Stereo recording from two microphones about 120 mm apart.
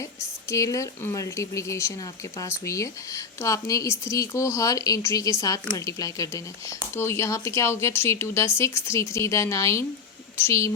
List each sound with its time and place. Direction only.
0.5 s speech: 25° left (ahead or behind)